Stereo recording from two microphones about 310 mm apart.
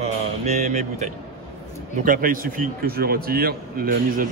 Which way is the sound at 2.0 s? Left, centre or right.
Right.